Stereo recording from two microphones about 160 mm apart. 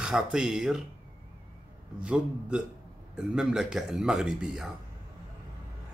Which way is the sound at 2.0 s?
5° right (ahead or behind).